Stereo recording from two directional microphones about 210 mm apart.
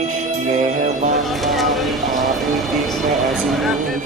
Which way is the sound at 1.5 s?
Centre (ahead or behind).